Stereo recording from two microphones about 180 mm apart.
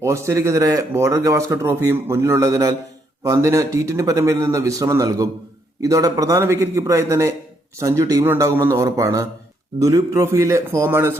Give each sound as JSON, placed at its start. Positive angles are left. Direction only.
{"t": 0.0, "sound": "speech", "side_deg": -15}